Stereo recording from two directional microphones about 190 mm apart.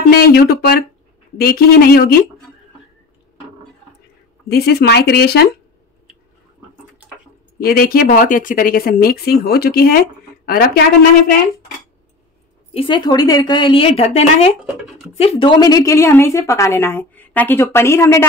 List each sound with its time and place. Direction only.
0.1 s speech: 50° left (ahead or behind)
4.5 s speech: 60° left (ahead or behind)
7.6 s speech: 50° left (ahead or behind)
12.7 s a woman's voice: 25° left (ahead or behind)